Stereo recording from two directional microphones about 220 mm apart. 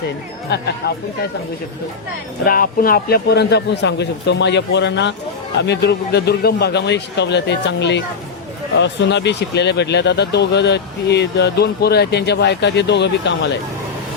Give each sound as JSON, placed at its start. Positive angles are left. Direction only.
{"t": 0.5, "sound": "speech", "side_deg": 50}
{"t": 2.4, "sound": "speech", "side_deg": 40}